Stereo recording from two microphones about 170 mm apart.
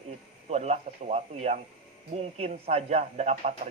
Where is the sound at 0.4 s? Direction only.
40° right (ahead or behind).